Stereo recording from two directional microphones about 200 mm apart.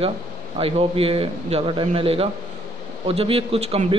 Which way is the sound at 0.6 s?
30° right (ahead or behind).